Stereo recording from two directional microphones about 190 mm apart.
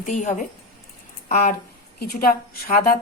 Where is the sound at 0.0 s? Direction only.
40° left (ahead or behind).